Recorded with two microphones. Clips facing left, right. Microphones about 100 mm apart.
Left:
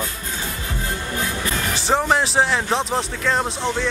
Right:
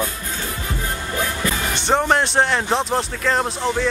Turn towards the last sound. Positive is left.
turn(degrees=0)  # may be behind; listen again after turning